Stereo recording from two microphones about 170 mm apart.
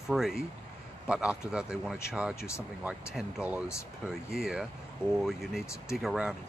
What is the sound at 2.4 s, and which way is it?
Speech, 15° left (ahead or behind).